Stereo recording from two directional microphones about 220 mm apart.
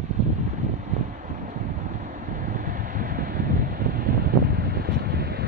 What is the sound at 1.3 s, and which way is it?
Wind noise, 35° right (ahead or behind).